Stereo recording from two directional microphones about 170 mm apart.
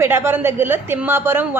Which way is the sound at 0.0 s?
15° right (ahead or behind).